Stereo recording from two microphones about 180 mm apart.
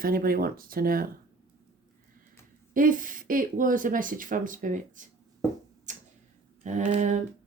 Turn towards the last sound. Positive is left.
turn(degrees=-40)  # may be behind; listen again after turning